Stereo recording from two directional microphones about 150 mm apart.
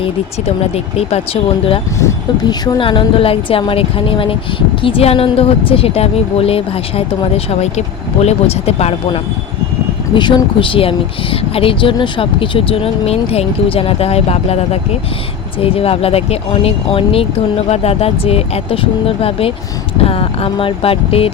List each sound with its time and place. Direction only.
0.4 s speech: 45° left (ahead or behind)
2.0 s speech: 25° left (ahead or behind); by 9.2 s 40° left (ahead or behind)
10.2 s speech: 30° left (ahead or behind)